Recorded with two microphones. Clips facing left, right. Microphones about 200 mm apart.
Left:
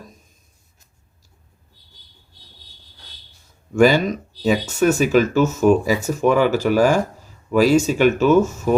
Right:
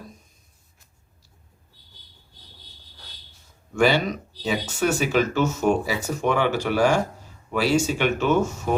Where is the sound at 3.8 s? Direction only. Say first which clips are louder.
Left 5 dB; 45° left (ahead or behind).